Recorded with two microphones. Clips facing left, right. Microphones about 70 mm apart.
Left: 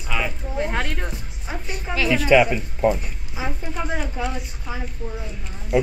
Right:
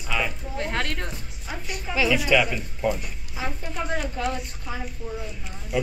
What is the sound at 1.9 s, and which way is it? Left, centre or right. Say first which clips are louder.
Speech: left 1 dB; centre.